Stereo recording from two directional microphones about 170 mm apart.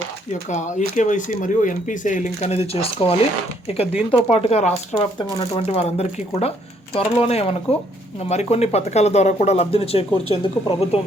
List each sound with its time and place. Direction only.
0.5 s speech: 45° left (ahead or behind)